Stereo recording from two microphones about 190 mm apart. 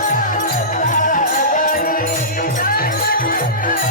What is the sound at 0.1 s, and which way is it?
Music, 45° left (ahead or behind).